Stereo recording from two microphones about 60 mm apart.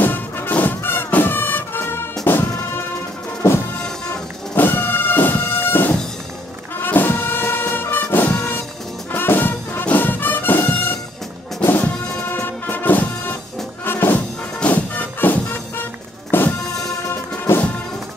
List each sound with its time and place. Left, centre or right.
0.0 s music: left
4.6 s bagpipes: left
6.8 s music: left
14.6 s music: left